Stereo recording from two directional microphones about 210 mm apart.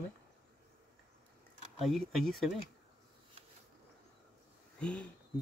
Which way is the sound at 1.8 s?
Centre (ahead or behind).